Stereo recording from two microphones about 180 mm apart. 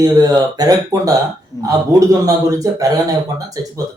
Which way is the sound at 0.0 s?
20° right (ahead or behind).